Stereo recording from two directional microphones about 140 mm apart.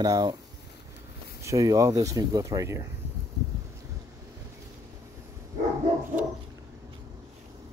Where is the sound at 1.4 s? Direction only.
25° right (ahead or behind).